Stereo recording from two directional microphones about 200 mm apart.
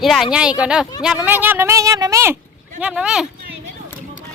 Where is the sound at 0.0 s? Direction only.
Centre (ahead or behind).